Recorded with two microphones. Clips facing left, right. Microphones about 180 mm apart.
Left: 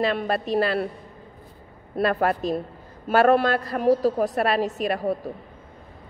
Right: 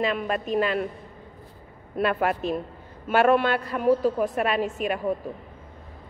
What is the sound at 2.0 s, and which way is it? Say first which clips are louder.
A woman's voice: left 2 dB; 40° left (ahead or behind).